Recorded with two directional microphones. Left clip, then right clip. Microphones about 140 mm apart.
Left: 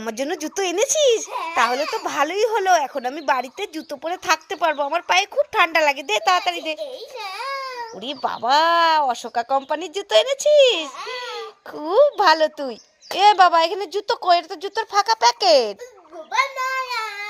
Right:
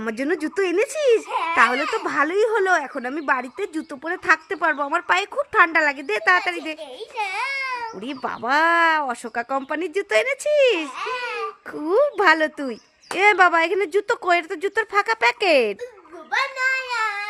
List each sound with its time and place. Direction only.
0.0 s speech: 5° left (ahead or behind)
7.2 s baby cry: 15° right (ahead or behind)
8.0 s speech: 5° right (ahead or behind)